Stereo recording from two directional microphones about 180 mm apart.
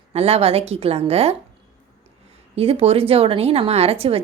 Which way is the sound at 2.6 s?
35° right (ahead or behind).